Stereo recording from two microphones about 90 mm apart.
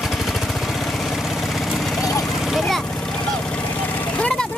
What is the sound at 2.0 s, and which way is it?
Vehicle, 40° left (ahead or behind).